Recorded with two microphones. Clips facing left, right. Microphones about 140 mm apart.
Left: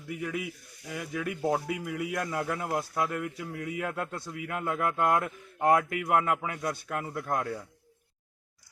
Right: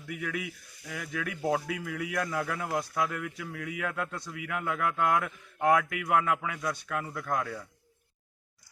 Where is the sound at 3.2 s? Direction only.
30° left (ahead or behind).